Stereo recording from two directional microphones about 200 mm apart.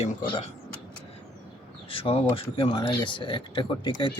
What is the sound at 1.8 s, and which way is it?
Speech, 25° left (ahead or behind).